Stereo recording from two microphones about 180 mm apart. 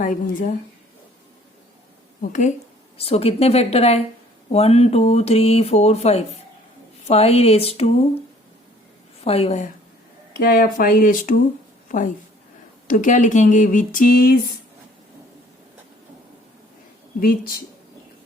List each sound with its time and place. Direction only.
0.0 s speech: 45° left (ahead or behind)
2.2 s speech: 45° left (ahead or behind)
3.0 s speech: 35° left (ahead or behind)
9.2 s speech: 35° left (ahead or behind)
10.3 s a woman's voice: 55° left (ahead or behind)